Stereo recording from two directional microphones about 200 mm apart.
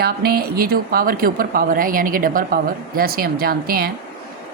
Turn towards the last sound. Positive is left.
turn(degrees=-50)  # may be behind; listen again after turning